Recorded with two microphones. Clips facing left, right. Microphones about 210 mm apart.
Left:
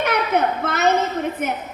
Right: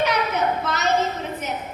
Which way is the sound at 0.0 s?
55° left (ahead or behind).